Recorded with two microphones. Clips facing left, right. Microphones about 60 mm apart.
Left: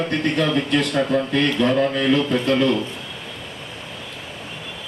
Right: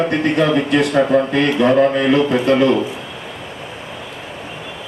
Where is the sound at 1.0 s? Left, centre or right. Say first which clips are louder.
Right 6 dB; centre.